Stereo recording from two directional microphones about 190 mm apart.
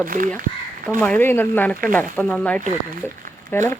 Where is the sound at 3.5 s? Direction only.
15° left (ahead or behind).